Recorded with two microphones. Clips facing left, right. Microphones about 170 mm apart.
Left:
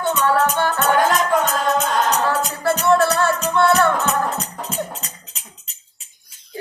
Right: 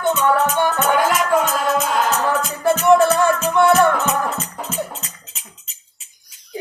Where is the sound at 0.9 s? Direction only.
10° right (ahead or behind).